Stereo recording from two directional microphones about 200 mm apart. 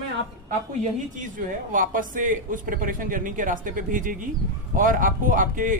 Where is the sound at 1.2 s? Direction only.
40° right (ahead or behind).